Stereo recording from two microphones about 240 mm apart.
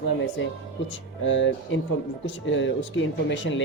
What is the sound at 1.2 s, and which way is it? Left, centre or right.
Speech, left.